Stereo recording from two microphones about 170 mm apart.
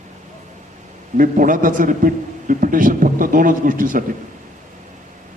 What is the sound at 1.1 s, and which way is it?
A man's voice, 55° right (ahead or behind).